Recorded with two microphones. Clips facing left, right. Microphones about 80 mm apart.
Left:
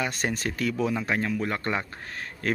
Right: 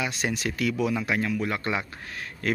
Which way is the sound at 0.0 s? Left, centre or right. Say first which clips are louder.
Even; left.